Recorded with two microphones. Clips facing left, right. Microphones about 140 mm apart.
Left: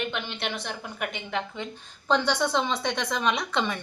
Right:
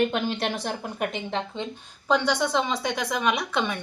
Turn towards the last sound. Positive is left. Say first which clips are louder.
# right 1 dB
turn(degrees=0)  # may be behind; listen again after turning